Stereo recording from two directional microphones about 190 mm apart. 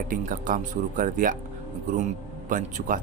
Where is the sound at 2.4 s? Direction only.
45° right (ahead or behind).